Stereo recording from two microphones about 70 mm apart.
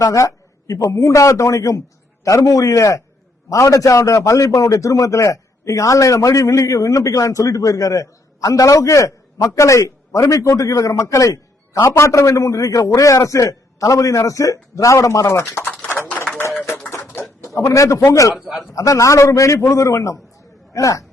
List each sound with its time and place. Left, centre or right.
0.0 s a man's voice: left
15.6 s speech: centre
16.0 s a sound: left
17.4 s a man's voice: left
18.3 s a man's voice: centre
18.7 s a man's voice: left